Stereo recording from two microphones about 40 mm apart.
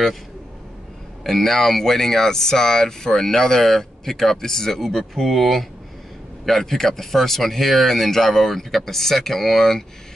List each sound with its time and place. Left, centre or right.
1.2 s speech: centre